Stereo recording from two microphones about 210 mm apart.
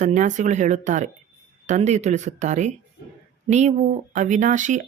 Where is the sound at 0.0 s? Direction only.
35° right (ahead or behind).